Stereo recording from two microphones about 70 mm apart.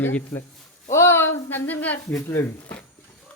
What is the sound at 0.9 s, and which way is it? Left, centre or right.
Speech, left.